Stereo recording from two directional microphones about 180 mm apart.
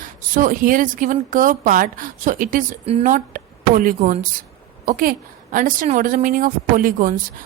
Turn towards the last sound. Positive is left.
turn(degrees=-50)  # may be behind; listen again after turning